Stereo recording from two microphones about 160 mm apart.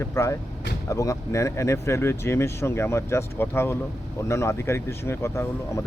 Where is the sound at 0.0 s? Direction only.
15° left (ahead or behind).